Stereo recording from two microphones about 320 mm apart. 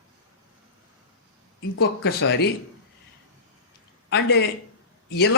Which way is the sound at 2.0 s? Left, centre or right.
Left.